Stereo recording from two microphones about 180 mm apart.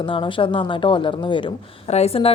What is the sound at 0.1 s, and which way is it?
A woman's voice, 30° left (ahead or behind).